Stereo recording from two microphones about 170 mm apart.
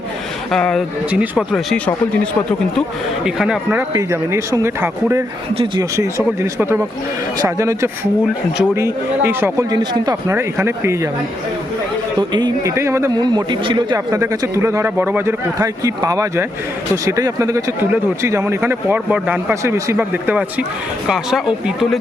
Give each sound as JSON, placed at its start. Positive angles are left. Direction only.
{"t": 0.5, "sound": "speech", "side_deg": 5}
{"t": 3.2, "sound": "speech", "side_deg": -5}
{"t": 12.3, "sound": "speech", "side_deg": -25}